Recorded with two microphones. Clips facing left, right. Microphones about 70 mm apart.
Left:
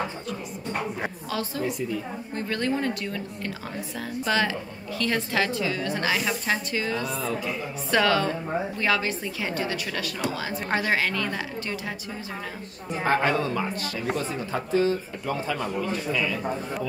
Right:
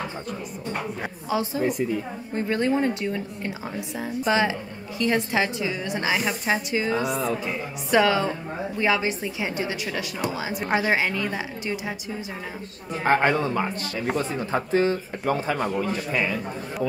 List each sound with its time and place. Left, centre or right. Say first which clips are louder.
1.3 s speech: right 7 dB; centre
1.6 s a woman's voice: right 4 dB; right
2.3 s a woman's voice: right 4 dB; right
13.0 s speech: right 3 dB; right